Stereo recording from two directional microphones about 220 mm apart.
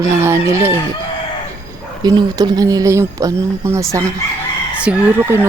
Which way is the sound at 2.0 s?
20° right (ahead or behind).